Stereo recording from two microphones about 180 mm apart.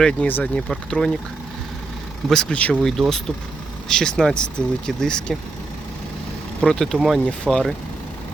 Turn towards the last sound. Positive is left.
turn(degrees=0)  # may be behind; listen again after turning